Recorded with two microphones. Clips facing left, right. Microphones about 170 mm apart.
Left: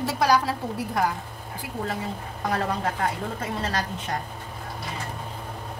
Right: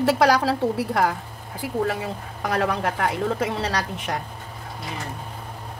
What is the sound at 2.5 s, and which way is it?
Speech, 80° right.